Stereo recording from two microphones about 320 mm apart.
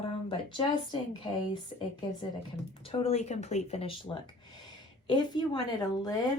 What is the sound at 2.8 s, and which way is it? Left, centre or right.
Speech, centre.